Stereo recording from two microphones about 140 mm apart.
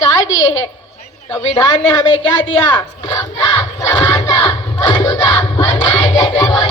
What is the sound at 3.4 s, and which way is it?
Battle cry, 25° left (ahead or behind).